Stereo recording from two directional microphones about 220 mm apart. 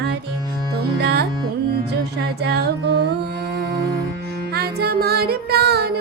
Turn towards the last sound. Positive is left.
turn(degrees=-45)  # may be behind; listen again after turning